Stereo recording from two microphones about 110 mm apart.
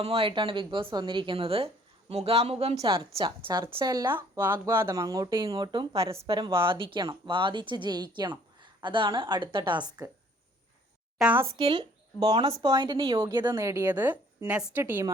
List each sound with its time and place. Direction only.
0.0 s speech: 55° right (ahead or behind)
2.8 s speech: 50° right (ahead or behind)
4.1 s speech: 20° right (ahead or behind); by 5.9 s 40° right (ahead or behind)
5.9 s speech: 60° right (ahead or behind); by 10.1 s 40° right (ahead or behind)
11.2 s speech: 5° right (ahead or behind)
11.5 s speech: 45° right (ahead or behind)
13.3 s speech: 40° right (ahead or behind)
13.9 s speech: 15° right (ahead or behind)